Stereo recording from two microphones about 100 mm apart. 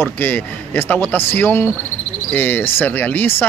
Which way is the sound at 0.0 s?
20° left (ahead or behind).